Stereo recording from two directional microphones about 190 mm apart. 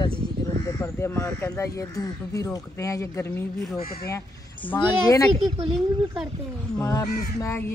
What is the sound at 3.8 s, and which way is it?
Speech, 50° left (ahead or behind).